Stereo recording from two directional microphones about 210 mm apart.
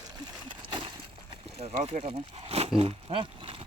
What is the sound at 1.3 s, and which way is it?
Speech, 25° right (ahead or behind).